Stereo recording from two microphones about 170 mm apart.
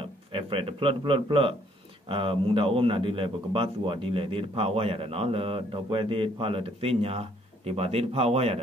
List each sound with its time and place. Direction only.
0.0 s speech: 30° right (ahead or behind)